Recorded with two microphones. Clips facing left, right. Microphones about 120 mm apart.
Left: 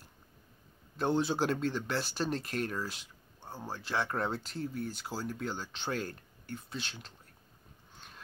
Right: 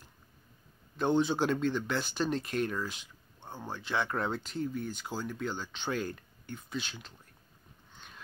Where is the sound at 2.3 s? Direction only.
35° left (ahead or behind).